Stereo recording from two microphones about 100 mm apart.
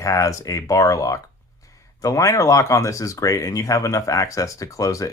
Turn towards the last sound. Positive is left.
turn(degrees=35)  # may be behind; listen again after turning